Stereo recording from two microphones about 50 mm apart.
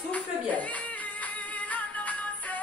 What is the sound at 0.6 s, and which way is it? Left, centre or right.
Music, left.